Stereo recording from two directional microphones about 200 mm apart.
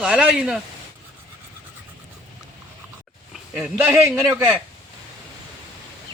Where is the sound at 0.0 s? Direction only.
5° right (ahead or behind).